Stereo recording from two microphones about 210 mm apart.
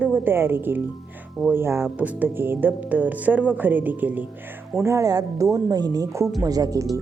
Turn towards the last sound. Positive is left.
turn(degrees=-15)  # may be behind; listen again after turning